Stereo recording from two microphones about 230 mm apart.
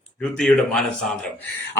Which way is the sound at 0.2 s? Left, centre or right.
Centre.